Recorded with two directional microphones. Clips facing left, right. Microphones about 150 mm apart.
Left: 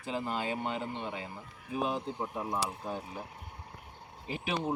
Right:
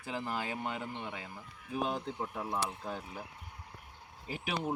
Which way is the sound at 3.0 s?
30° left (ahead or behind).